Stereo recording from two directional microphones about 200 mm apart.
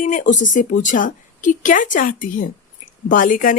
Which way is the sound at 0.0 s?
40° left (ahead or behind).